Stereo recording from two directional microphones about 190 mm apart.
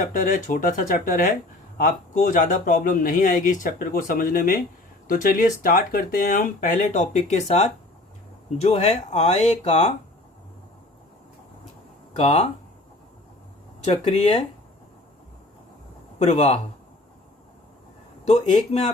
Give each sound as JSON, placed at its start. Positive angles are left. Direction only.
{"t": 0.0, "sound": "speech", "side_deg": 45}
{"t": 12.1, "sound": "speech", "side_deg": 35}
{"t": 13.8, "sound": "speech", "side_deg": 35}
{"t": 16.1, "sound": "speech", "side_deg": 35}
{"t": 18.3, "sound": "speech", "side_deg": 35}